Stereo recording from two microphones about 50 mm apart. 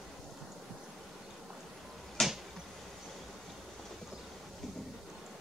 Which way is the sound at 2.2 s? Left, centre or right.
Centre.